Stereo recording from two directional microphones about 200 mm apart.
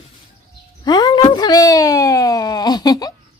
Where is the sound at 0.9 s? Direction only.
20° left (ahead or behind).